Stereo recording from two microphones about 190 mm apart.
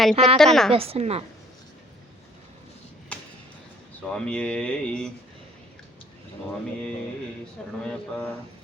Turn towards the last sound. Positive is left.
turn(degrees=5)  # may be behind; listen again after turning